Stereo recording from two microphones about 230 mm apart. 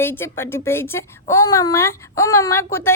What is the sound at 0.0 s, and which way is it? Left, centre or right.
A woman's voice, centre.